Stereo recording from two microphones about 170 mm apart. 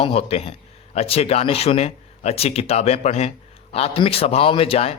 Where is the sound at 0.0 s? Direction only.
35° left (ahead or behind).